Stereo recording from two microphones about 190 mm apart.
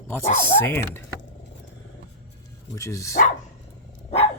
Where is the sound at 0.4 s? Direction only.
10° left (ahead or behind).